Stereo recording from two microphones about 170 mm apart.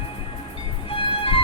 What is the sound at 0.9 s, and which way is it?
Music, 35° left (ahead or behind).